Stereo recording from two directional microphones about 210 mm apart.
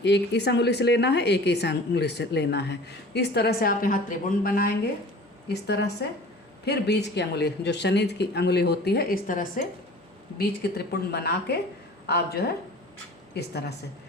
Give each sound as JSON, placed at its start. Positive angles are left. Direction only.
{"t": 0.0, "sound": "a woman's voice", "side_deg": 55}